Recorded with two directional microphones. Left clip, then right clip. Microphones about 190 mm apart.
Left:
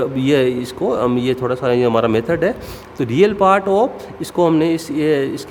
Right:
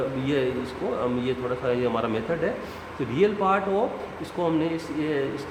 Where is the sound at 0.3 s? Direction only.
60° left (ahead or behind).